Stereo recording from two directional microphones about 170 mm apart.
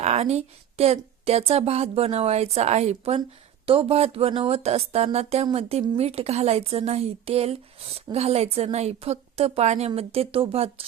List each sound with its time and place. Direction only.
0.0 s speech: 40° right (ahead or behind)